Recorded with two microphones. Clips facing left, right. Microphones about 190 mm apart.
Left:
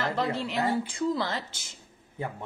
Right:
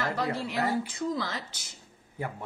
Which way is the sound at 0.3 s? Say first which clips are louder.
Left 1 dB; 25° left (ahead or behind).